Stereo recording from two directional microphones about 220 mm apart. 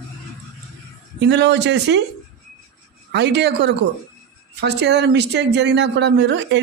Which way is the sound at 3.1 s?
50° right (ahead or behind).